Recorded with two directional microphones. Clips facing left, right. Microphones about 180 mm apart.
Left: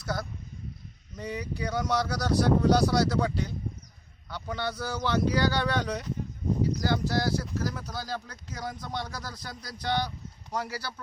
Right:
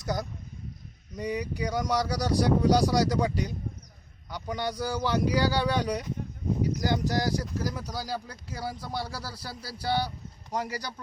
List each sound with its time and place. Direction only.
0.0 s speech: 15° right (ahead or behind)